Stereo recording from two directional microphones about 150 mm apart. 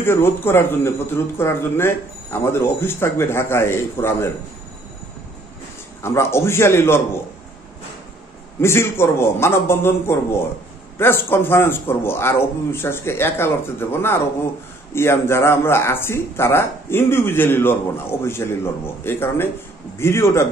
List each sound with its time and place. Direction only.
0.0 s speech: 15° left (ahead or behind)
6.0 s speech: 15° left (ahead or behind)
8.5 s speech: 15° left (ahead or behind)